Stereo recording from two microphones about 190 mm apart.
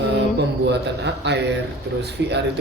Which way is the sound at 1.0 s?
65° right (ahead or behind).